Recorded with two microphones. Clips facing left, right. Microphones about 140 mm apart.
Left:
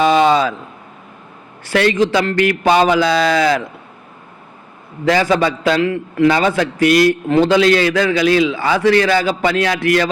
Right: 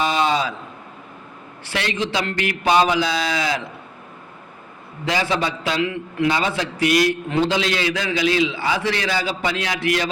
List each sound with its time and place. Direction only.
0.0 s a sound: 55° left (ahead or behind)
1.7 s a man's voice: 45° left (ahead or behind)
3.1 s speech: 75° left (ahead or behind)
3.3 s a man's voice: 50° left (ahead or behind)
5.0 s a man's voice: 50° left (ahead or behind)